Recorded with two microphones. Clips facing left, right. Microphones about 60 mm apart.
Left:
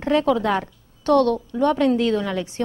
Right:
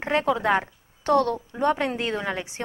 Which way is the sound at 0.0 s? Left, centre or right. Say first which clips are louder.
Left 4 dB; right.